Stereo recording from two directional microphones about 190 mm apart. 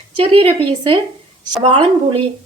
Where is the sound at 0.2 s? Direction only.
30° right (ahead or behind).